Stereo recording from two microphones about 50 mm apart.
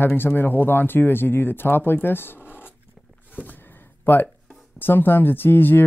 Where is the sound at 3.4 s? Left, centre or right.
Left.